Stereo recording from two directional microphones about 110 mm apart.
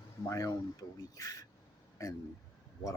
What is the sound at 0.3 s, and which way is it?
Speech, 35° left (ahead or behind).